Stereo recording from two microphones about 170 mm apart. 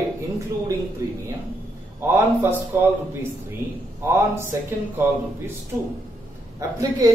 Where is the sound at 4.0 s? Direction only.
15° right (ahead or behind).